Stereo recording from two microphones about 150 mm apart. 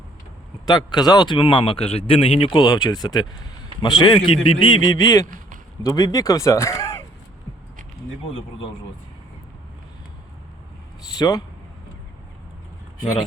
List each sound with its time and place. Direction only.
0.6 s speech: 30° left (ahead or behind)
5.2 s a sound: 60° right (ahead or behind)
5.8 s speech: 20° left (ahead or behind)
11.1 s speech: 25° left (ahead or behind)